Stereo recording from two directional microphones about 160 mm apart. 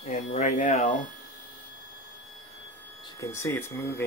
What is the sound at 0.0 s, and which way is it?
Speech, 55° left (ahead or behind).